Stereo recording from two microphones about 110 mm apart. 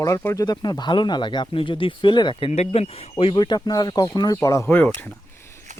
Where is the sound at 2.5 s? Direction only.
75° left (ahead or behind).